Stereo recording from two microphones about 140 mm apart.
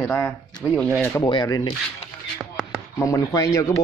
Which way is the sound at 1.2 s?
30° left (ahead or behind).